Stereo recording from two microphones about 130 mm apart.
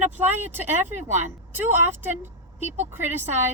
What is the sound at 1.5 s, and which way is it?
Speech, 15° right (ahead or behind).